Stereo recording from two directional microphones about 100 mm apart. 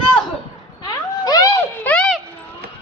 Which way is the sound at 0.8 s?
40° left (ahead or behind).